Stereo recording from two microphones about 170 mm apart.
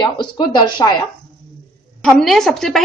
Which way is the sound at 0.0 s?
25° left (ahead or behind).